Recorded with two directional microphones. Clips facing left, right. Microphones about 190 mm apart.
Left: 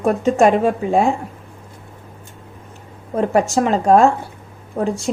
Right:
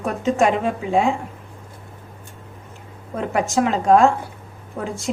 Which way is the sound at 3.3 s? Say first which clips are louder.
Left 2 dB; 35° left (ahead or behind).